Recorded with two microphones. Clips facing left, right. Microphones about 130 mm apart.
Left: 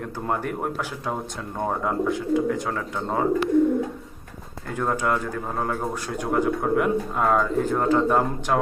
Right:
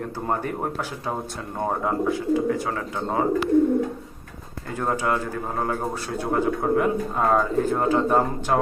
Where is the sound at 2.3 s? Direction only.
5° right (ahead or behind).